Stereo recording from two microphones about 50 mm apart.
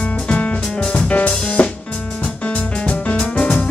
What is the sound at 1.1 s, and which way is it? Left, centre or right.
Music, left.